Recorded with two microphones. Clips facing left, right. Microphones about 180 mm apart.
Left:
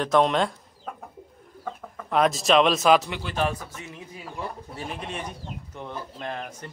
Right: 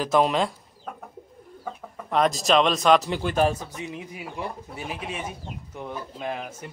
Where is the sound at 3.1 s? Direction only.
45° right (ahead or behind).